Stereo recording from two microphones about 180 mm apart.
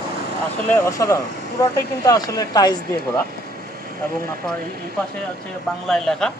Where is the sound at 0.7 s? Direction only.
15° left (ahead or behind).